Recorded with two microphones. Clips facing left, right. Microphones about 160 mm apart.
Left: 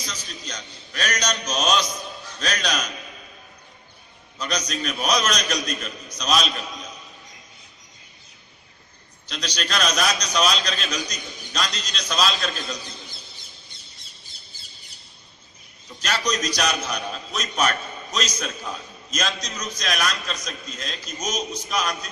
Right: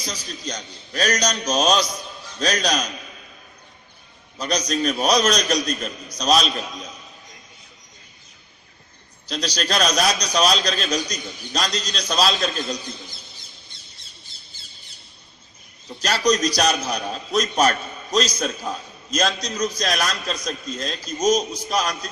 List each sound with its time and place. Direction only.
0.0 s a man's voice: 35° right (ahead or behind)
4.4 s a man's voice: 35° right (ahead or behind)
9.3 s a man's voice: 35° right (ahead or behind)
16.0 s a man's voice: 35° right (ahead or behind)